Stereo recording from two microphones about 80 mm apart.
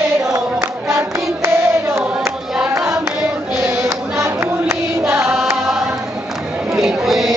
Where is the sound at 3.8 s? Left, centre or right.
Right.